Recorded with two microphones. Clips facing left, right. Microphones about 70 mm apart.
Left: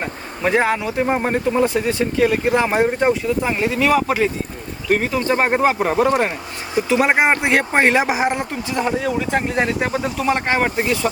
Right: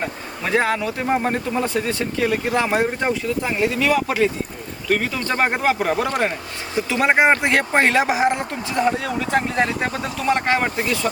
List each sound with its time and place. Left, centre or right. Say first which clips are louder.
0.0 s speech: left 4 dB; centre
8.9 s speech: left 3 dB; centre; by 10.9 s left